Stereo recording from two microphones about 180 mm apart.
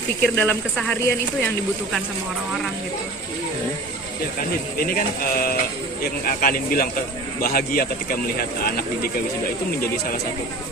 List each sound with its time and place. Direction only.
0.2 s speech: 10° left (ahead or behind)
4.8 s speech: 55° left (ahead or behind)